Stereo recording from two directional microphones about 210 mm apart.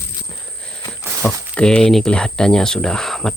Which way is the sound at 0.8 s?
5° left (ahead or behind).